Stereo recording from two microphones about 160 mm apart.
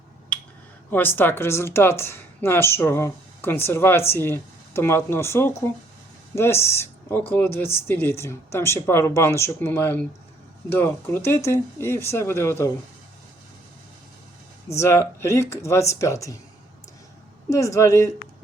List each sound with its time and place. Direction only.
0.9 s speech: 10° left (ahead or behind)
14.8 s speech: 15° left (ahead or behind)
17.5 s a woman's voice: 20° left (ahead or behind)